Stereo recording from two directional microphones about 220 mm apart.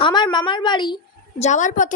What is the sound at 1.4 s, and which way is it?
Speech, 35° left (ahead or behind).